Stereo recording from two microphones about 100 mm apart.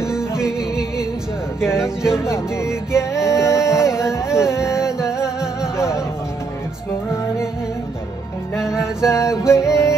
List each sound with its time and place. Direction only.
0.0 s music: 5° right (ahead or behind)
1.8 s speech: 5° right (ahead or behind)
2.3 s music: 25° left (ahead or behind)
5.2 s music: 5° right (ahead or behind)
8.5 s music: 5° right (ahead or behind)
9.1 s music: 30° left (ahead or behind)